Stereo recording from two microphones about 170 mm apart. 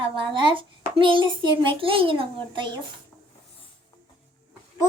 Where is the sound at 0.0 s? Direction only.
30° right (ahead or behind).